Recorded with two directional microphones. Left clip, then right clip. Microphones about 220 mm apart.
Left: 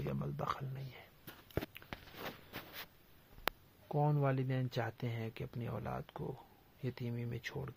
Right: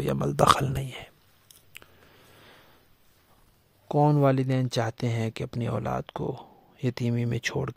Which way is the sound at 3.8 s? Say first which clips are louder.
Right 13 dB; 55° right (ahead or behind).